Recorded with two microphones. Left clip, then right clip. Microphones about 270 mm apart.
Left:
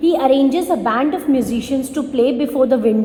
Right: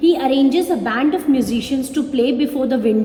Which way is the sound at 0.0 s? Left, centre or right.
Left.